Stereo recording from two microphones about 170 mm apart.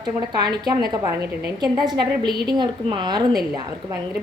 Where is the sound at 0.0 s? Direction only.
25° right (ahead or behind).